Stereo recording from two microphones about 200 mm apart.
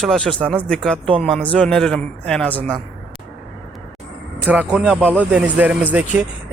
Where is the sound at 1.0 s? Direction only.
25° right (ahead or behind).